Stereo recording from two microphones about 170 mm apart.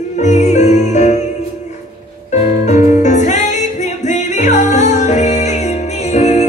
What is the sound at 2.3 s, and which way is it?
Music, 45° left (ahead or behind).